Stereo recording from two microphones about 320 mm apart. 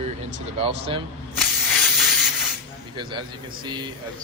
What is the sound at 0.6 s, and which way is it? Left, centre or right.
Speech, centre.